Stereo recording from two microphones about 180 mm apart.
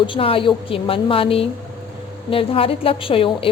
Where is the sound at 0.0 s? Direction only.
30° left (ahead or behind).